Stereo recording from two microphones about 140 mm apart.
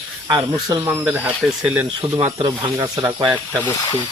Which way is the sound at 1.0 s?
10° right (ahead or behind).